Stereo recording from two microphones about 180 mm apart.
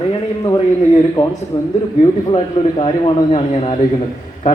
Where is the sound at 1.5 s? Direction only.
25° left (ahead or behind).